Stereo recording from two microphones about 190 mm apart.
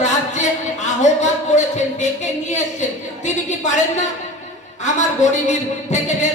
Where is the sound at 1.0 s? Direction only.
40° left (ahead or behind).